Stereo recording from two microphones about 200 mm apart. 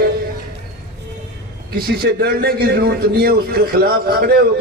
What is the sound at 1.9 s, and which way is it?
A man's voice, 50° right (ahead or behind).